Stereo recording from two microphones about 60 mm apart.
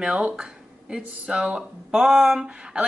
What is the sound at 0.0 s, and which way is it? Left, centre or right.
Speech, centre.